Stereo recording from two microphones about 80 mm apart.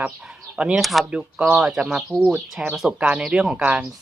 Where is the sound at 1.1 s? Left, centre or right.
Centre.